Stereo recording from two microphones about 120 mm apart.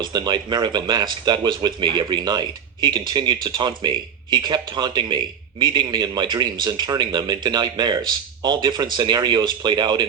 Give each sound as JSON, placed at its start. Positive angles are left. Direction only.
{"t": 0.0, "sound": "speech", "side_deg": -35}